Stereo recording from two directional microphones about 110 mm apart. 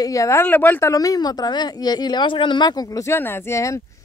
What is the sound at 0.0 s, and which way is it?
Speech, 30° left (ahead or behind).